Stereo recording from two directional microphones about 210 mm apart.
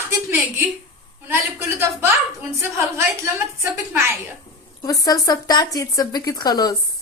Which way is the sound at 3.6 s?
10° right (ahead or behind).